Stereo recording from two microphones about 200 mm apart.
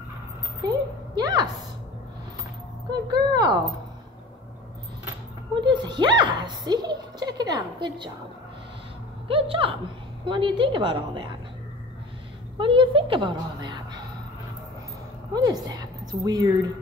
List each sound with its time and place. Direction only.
0.7 s a woman's voice: 20° right (ahead or behind)
3.1 s a child's voice: 20° right (ahead or behind)
5.6 s a child's voice: 20° right (ahead or behind)
9.3 s a child's voice: 25° right (ahead or behind)
12.5 s a child's voice: 25° right (ahead or behind)
15.3 s a woman's voice: 20° right (ahead or behind)